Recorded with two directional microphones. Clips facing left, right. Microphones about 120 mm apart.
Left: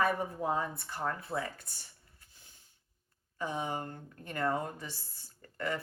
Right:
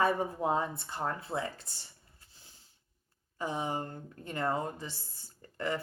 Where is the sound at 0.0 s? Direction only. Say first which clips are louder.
Right 2 dB; 25° right (ahead or behind).